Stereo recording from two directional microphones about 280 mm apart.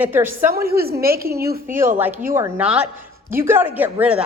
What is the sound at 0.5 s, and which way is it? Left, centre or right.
Speech, right.